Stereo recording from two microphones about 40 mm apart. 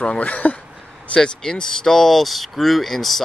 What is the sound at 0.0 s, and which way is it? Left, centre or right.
Speech, left.